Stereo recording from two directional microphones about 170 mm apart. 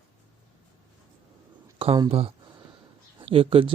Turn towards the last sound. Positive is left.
turn(degrees=-30)  # may be behind; listen again after turning